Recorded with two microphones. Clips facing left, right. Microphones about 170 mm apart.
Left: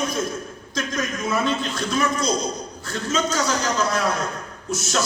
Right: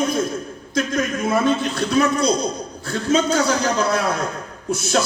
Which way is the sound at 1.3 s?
60° right (ahead or behind).